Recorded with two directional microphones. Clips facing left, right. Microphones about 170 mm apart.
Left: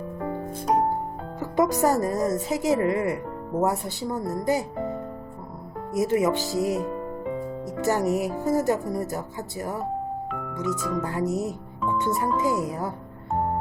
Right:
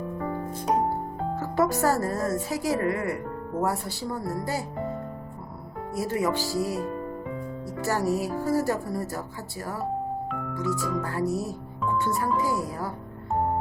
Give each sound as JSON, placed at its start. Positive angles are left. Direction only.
{"t": 1.4, "sound": "a woman's voice", "side_deg": 20}
{"t": 5.9, "sound": "speech", "side_deg": 20}